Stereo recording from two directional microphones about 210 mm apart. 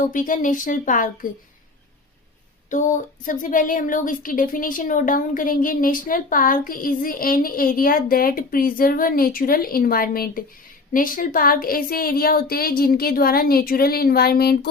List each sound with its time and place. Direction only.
0.1 s speech: 40° left (ahead or behind)
2.6 s a woman's voice: 35° left (ahead or behind)